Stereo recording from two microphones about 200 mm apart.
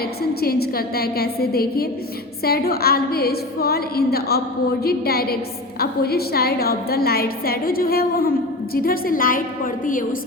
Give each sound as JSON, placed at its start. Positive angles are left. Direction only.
{"t": 0.2, "sound": "a woman's voice", "side_deg": 50}